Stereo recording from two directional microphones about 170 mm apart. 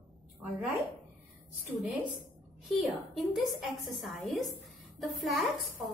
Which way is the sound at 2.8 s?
Centre (ahead or behind).